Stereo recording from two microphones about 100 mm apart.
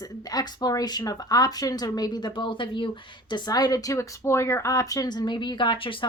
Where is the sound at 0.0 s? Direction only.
40° left (ahead or behind).